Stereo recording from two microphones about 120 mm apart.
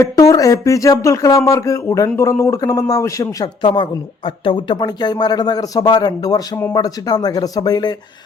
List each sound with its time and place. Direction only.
0.0 s speech: 25° left (ahead or behind)
4.4 s speech: 40° left (ahead or behind)